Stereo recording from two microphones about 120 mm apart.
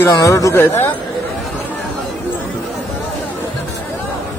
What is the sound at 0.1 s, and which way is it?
Speech, 30° left (ahead or behind).